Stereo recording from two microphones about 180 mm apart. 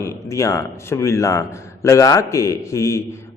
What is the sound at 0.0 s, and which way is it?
A man's voice, 15° left (ahead or behind).